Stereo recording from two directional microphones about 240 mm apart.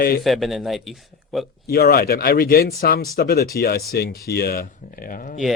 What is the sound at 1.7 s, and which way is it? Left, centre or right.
Speech, left.